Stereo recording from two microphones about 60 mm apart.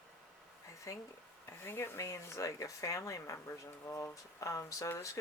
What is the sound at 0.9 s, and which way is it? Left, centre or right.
Speech, left.